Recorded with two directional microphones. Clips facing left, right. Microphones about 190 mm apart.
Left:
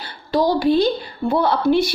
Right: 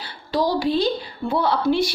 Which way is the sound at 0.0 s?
55° left (ahead or behind).